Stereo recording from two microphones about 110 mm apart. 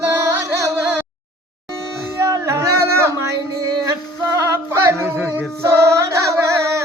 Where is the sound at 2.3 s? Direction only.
25° right (ahead or behind).